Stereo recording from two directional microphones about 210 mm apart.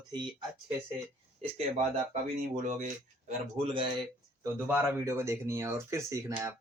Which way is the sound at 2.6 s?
35° right (ahead or behind).